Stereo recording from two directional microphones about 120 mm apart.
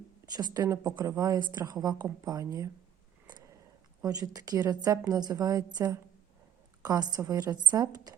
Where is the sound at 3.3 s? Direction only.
35° right (ahead or behind).